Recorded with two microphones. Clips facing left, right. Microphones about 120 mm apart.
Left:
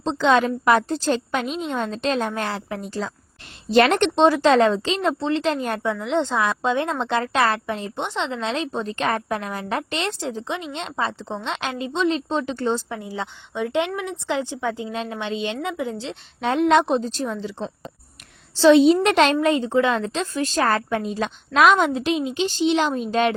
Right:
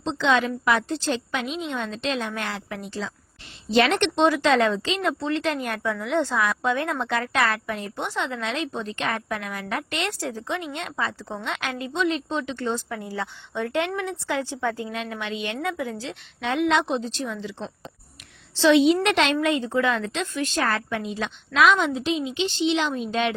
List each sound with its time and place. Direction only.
0.0 s a woman's voice: 40° left (ahead or behind)
3.7 s a woman's voice: 45° left (ahead or behind)
13.0 s speech: 15° left (ahead or behind)
14.9 s speech: 30° left (ahead or behind)
16.4 s a woman's voice: 35° left (ahead or behind)